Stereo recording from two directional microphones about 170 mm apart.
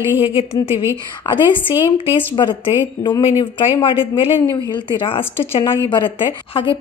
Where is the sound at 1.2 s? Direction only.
30° left (ahead or behind).